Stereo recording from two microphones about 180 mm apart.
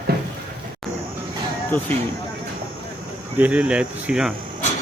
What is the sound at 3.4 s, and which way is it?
Speech, 10° right (ahead or behind).